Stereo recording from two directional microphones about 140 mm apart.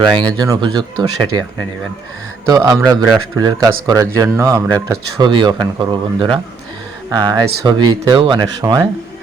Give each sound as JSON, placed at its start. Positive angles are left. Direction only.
{"t": 0.0, "sound": "speech", "side_deg": -35}
{"t": 2.5, "sound": "speech", "side_deg": -25}